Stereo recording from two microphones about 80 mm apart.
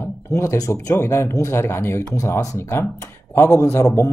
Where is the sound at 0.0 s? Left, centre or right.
Left.